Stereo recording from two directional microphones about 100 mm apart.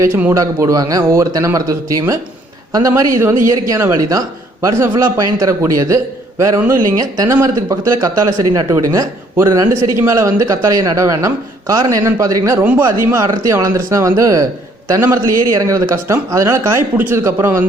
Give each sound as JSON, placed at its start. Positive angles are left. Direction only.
{"t": 0.3, "sound": "a man's voice", "side_deg": -35}